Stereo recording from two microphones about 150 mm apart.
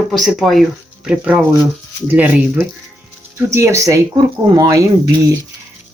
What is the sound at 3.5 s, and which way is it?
Speech, 20° right (ahead or behind).